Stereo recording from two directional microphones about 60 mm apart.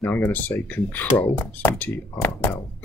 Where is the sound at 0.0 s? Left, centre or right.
Left.